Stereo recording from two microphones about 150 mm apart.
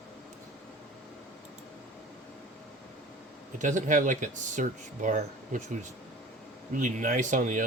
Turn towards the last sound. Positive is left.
turn(degrees=-60)  # may be behind; listen again after turning